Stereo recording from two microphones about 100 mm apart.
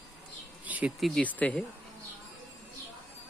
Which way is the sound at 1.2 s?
15° left (ahead or behind).